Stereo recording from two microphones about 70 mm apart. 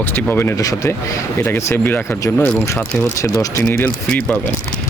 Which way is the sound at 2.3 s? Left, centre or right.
Centre.